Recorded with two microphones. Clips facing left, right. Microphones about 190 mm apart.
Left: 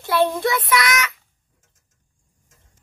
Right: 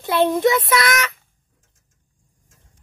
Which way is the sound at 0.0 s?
20° right (ahead or behind).